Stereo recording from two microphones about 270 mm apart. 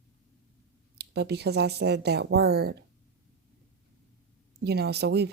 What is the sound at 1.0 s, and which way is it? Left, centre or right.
Speech, right.